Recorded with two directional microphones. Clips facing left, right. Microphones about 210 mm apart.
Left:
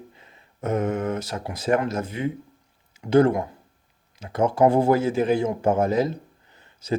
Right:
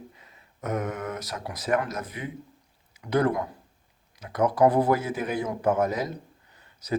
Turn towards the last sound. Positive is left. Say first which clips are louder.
# left 5 dB
turn(degrees=25)  # may be behind; listen again after turning